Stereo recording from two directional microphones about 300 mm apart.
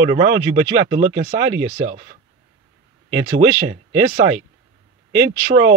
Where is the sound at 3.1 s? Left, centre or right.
Right.